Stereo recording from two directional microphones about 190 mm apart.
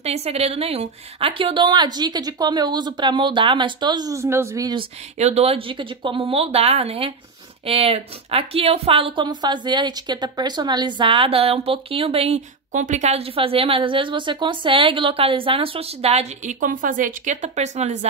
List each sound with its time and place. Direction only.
0.0 s a woman's voice: 35° right (ahead or behind)
5.2 s a woman's voice: 35° right (ahead or behind)